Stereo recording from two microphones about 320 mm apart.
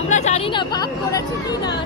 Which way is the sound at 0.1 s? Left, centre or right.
Centre.